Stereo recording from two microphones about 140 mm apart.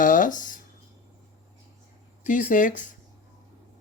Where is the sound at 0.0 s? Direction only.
70° left (ahead or behind).